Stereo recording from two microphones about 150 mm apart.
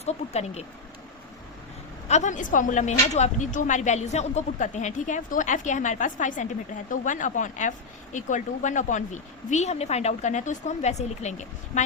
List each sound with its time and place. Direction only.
0.0 s a woman's voice: 45° left (ahead or behind)
2.0 s a woman's voice: 50° left (ahead or behind)